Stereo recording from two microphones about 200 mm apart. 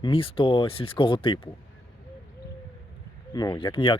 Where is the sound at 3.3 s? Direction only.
20° left (ahead or behind).